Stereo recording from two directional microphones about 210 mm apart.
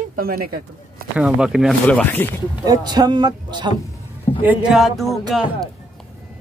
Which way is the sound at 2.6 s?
20° right (ahead or behind).